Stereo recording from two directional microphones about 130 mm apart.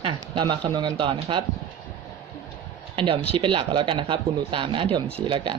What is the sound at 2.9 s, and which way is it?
Speech, 45° right (ahead or behind).